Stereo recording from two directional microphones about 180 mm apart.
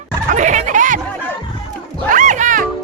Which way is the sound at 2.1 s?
45° right (ahead or behind).